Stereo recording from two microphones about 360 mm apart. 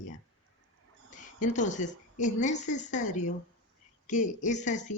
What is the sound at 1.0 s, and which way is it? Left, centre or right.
A woman's voice, centre.